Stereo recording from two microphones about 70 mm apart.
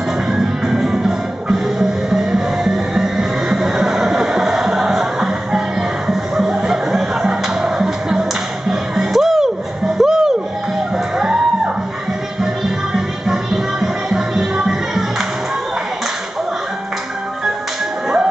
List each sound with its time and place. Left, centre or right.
0.3 s music: centre
12.9 s music: centre